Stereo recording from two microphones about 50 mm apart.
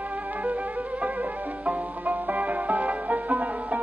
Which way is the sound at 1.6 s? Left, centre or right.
Right.